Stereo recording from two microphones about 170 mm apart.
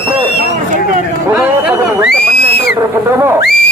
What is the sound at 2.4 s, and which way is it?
Whistle, 70° left (ahead or behind).